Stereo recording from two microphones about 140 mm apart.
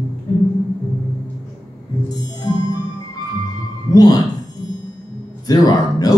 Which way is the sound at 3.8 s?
30° left (ahead or behind).